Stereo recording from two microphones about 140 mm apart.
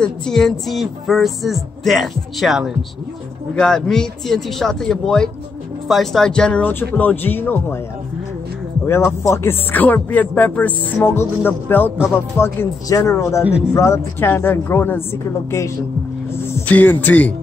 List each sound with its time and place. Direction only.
0.0 s speech: 5° left (ahead or behind)
8.8 s speech: 20° left (ahead or behind)
16.3 s speech: 15° left (ahead or behind)